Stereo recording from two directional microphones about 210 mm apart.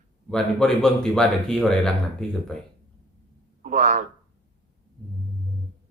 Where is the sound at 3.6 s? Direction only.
40° right (ahead or behind).